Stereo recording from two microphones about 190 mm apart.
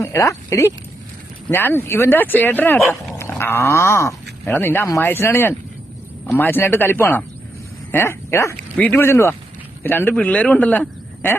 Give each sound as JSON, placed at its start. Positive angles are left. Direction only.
{"t": 0.0, "sound": "a man's voice", "side_deg": 15}